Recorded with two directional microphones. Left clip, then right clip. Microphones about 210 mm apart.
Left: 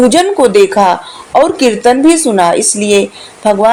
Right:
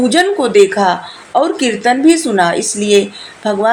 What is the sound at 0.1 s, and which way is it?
Speech, 20° left (ahead or behind).